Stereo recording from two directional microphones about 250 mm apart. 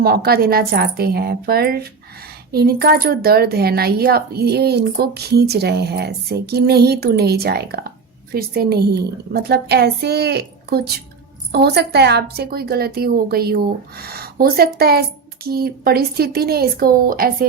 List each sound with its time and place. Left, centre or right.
0.0 s speech: right